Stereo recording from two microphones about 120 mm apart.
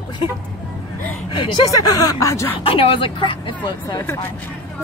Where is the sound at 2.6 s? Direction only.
50° left (ahead or behind).